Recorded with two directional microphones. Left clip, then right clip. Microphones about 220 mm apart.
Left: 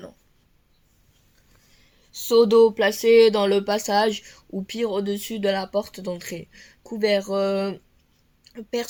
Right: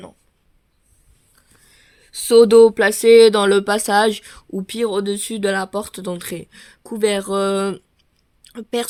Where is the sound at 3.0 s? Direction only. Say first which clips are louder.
Right 6 dB; 50° right (ahead or behind).